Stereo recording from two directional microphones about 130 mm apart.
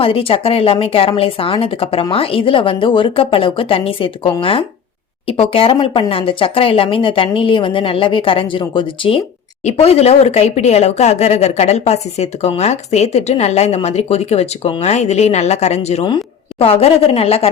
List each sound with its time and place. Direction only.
0.0 s a woman's voice: 45° left (ahead or behind)
9.6 s a woman's voice: 55° left (ahead or behind)